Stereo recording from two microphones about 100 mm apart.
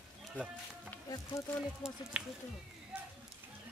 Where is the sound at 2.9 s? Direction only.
5° right (ahead or behind).